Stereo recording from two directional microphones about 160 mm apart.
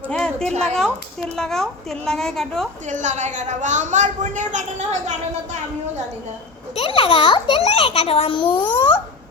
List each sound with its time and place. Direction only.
0.1 s a sound: 5° left (ahead or behind)
0.6 s a woman's voice: 5° left (ahead or behind)
2.9 s a woman's voice: 50° right (ahead or behind)
6.7 s a child's voice: 35° left (ahead or behind)